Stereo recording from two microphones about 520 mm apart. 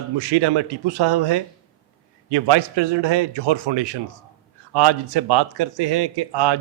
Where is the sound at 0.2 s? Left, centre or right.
Right.